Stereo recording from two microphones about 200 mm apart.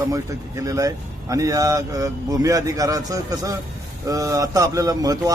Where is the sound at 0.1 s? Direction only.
15° right (ahead or behind).